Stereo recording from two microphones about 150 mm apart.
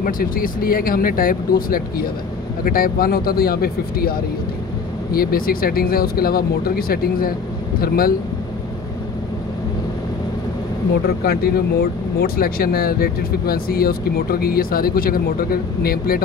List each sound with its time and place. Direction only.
0.0 s speech: 70° left (ahead or behind)
11.2 s speech: 90° left